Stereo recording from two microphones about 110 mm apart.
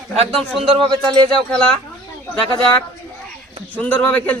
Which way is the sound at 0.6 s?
55° right (ahead or behind).